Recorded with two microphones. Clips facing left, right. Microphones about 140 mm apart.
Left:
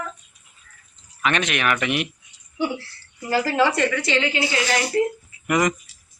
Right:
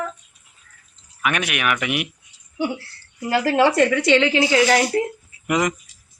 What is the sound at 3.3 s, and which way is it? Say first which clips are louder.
Speech: right 3 dB; 55° right (ahead or behind).